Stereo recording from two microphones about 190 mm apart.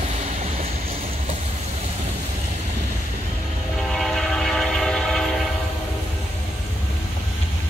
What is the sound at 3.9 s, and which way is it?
Train, centre (ahead or behind).